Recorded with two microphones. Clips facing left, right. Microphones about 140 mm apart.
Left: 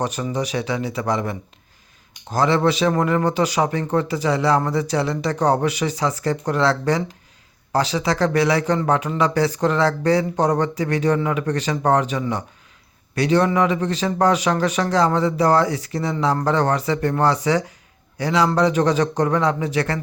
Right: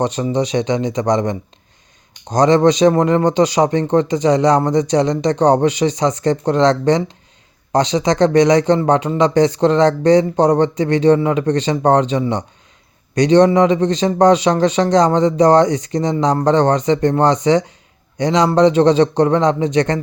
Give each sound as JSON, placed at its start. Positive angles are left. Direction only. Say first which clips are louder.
{"t": 0.3, "sound": "speech", "louder": "right 7 dB", "side_deg": -35}